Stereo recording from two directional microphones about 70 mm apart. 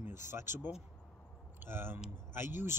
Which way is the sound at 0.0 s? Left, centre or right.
Right.